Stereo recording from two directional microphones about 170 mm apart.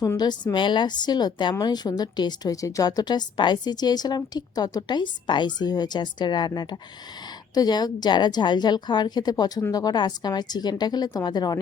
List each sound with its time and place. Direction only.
0.0 s a woman's voice: 20° left (ahead or behind)